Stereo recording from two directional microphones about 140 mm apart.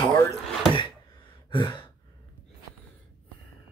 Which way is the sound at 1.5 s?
35° left (ahead or behind).